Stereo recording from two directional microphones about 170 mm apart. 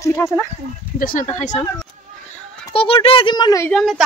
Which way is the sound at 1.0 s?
55° left (ahead or behind).